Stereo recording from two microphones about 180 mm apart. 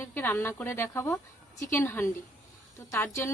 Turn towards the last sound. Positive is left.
turn(degrees=10)  # may be behind; listen again after turning